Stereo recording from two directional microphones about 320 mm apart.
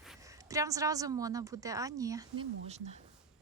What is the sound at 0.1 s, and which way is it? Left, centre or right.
A woman's voice, centre.